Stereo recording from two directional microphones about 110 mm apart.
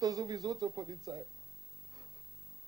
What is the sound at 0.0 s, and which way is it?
Speech, 35° right (ahead or behind).